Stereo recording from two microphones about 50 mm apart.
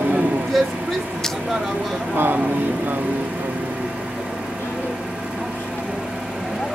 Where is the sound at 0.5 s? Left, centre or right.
Centre.